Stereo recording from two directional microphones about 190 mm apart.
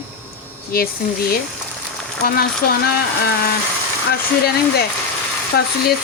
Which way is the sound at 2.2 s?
50° left (ahead or behind).